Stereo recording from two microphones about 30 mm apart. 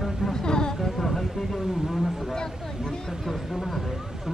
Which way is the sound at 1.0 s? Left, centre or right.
Centre.